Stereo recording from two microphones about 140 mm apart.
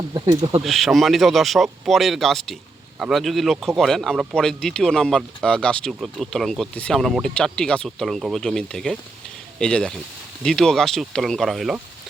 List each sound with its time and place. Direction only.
0.1 s speech: 35° right (ahead or behind)
0.6 s speech: centre (ahead or behind)